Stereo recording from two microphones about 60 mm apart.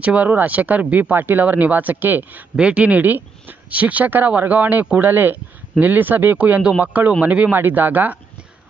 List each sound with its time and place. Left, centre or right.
0.0 s speech: right
2.6 s speech: right
6.6 s speech: centre
7.5 s speech: right